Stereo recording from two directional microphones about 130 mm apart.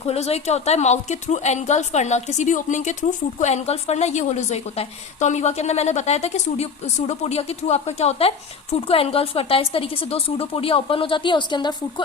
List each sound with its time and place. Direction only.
0.1 s a woman's voice: 55° left (ahead or behind); by 12.0 s 35° left (ahead or behind)